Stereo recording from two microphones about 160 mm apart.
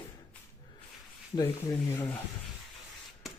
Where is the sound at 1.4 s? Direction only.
15° left (ahead or behind).